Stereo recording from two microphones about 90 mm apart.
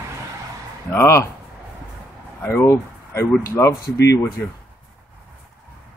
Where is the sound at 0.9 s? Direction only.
30° left (ahead or behind).